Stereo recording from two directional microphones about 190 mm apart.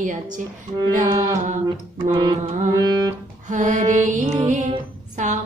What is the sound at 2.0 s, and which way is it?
Music, 25° right (ahead or behind).